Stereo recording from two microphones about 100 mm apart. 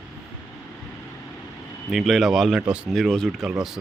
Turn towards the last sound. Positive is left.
turn(degrees=5)  # may be behind; listen again after turning